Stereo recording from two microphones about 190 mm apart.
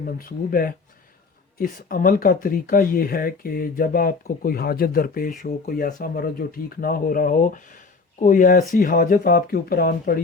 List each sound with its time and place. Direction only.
0.0 s speech: 50° left (ahead or behind)